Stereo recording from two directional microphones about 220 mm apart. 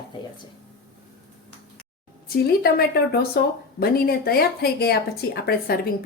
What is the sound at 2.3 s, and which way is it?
Speech, 45° left (ahead or behind).